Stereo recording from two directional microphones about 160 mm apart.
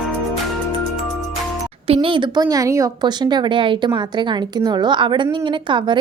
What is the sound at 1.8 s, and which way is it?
Speech, 35° right (ahead or behind).